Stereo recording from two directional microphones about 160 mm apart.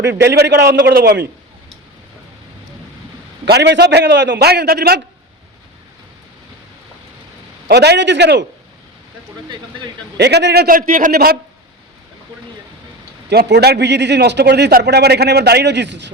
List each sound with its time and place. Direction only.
0.3 s a man's voice: 90° right
3.4 s a man's voice: 90° right
7.7 s a man's voice: 90° right
10.2 s a man's voice: 90° right; by 11.3 s 70° right (ahead or behind)
13.3 s a man's voice: 85° right